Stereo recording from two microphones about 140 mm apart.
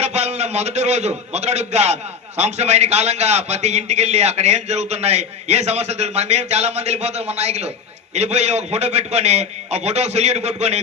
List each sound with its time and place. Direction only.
0.0 s a man's voice: 50° right (ahead or behind)